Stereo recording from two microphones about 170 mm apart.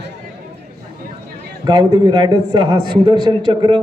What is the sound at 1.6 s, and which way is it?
A man's voice, 25° right (ahead or behind).